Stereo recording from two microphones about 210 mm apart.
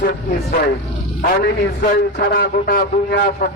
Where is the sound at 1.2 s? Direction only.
40° left (ahead or behind).